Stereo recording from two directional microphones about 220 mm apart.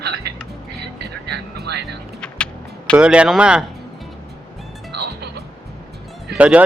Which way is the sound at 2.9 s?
5° right (ahead or behind).